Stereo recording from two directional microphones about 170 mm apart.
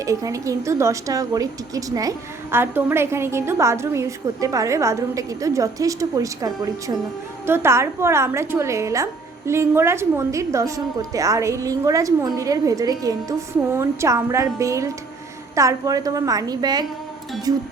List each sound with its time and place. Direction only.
0.0 s a woman's voice: 20° right (ahead or behind)